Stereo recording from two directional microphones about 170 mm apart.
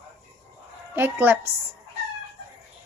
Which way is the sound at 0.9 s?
10° right (ahead or behind).